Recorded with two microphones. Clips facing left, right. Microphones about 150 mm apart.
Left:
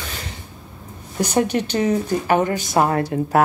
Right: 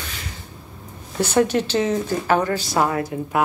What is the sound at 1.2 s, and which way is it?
Speech, 15° left (ahead or behind).